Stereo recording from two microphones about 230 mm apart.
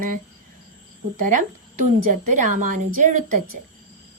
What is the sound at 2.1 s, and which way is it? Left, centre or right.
A woman's voice, right.